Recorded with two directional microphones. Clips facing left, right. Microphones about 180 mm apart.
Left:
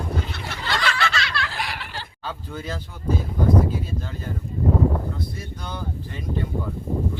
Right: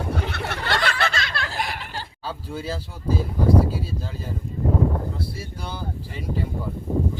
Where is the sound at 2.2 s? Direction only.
5° right (ahead or behind).